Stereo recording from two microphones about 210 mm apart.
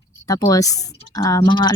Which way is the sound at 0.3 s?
15° left (ahead or behind).